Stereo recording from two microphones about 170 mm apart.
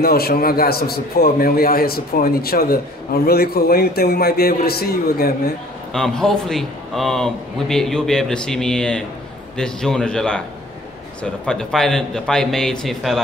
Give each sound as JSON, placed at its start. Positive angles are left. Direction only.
{"t": 0.0, "sound": "a man's voice", "side_deg": 65}
{"t": 5.9, "sound": "a man's voice", "side_deg": 5}
{"t": 11.4, "sound": "a man's voice", "side_deg": 5}